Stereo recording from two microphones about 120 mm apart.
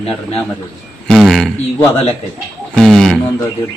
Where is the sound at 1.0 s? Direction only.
Centre (ahead or behind).